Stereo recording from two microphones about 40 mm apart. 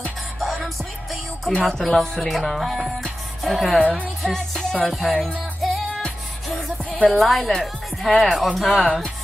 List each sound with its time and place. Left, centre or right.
1.7 s speech: centre
3.7 s speech: left
4.2 s music: centre
4.8 s speech: centre
5.1 s music: centre
7.1 s speech: centre